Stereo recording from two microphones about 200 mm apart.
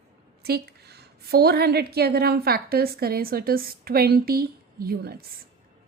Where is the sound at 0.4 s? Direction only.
55° right (ahead or behind).